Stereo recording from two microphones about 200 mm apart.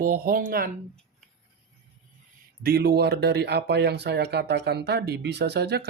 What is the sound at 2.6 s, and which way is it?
Speech, 55° right (ahead or behind).